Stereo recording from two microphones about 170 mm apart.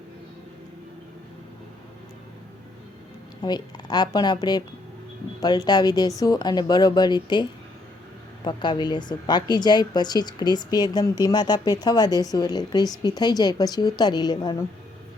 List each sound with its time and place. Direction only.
3.4 s a woman's voice: 25° left (ahead or behind)
8.4 s a woman's voice: 25° left (ahead or behind)